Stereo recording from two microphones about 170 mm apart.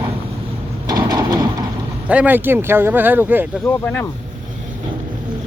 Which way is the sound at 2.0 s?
10° right (ahead or behind).